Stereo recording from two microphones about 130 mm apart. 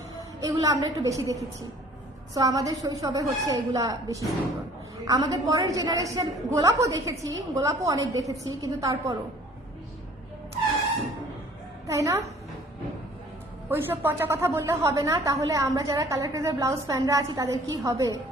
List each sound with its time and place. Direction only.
0.3 s a woman's voice: 25° right (ahead or behind)
11.9 s a woman's voice: 25° right (ahead or behind)
13.7 s a woman's voice: 15° right (ahead or behind)